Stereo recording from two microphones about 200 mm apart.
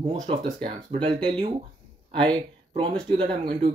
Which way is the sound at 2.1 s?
25° right (ahead or behind).